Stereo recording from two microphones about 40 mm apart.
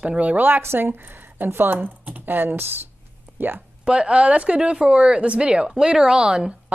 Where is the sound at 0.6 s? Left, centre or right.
Right.